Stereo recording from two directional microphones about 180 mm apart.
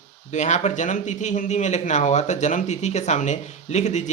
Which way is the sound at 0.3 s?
40° left (ahead or behind).